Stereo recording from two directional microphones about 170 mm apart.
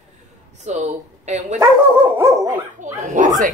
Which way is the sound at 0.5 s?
45° right (ahead or behind).